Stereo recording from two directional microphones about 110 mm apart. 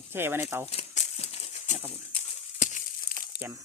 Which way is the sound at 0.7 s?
70° left (ahead or behind).